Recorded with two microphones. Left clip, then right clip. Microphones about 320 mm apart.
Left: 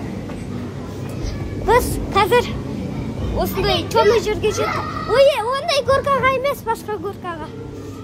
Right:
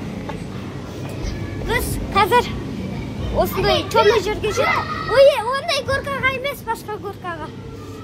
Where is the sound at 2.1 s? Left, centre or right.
Centre.